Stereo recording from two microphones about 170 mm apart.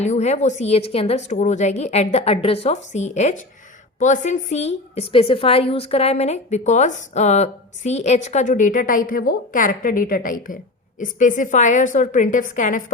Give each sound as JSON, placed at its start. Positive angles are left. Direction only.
{"t": 0.0, "sound": "a woman's voice", "side_deg": 40}